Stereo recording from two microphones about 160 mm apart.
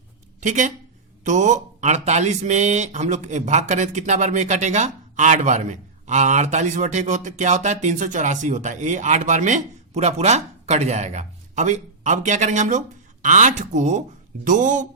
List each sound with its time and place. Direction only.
0.3 s speech: 50° right (ahead or behind)